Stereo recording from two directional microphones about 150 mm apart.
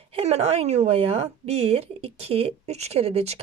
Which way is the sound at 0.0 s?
40° right (ahead or behind).